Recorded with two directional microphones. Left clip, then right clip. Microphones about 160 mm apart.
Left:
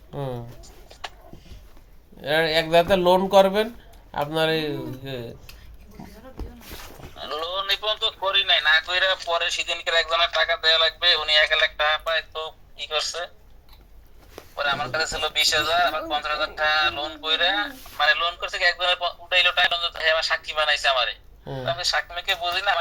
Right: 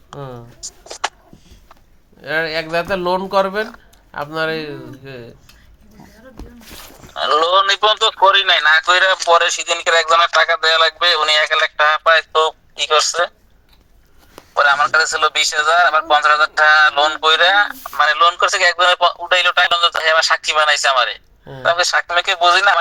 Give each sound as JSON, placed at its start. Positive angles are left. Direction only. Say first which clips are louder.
{"t": 0.2, "sound": "speech", "louder": "left 1 dB", "side_deg": 10}
{"t": 0.6, "sound": "a sound", "louder": "right 14 dB", "side_deg": -65}
{"t": 2.2, "sound": "speech", "louder": "right 1 dB", "side_deg": 10}
{"t": 7.1, "sound": "a man's voice", "louder": "right 16 dB", "side_deg": -65}
{"t": 14.3, "sound": "a man's voice", "louder": "right 12 dB", "side_deg": -65}